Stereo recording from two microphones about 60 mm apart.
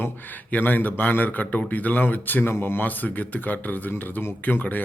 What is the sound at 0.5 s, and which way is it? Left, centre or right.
A man's voice, left.